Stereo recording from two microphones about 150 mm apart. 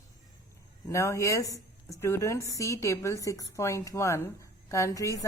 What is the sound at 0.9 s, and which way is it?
A woman's voice, 20° left (ahead or behind).